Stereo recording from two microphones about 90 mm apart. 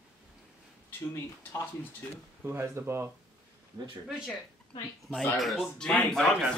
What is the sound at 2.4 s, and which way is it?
Speech, 25° right (ahead or behind).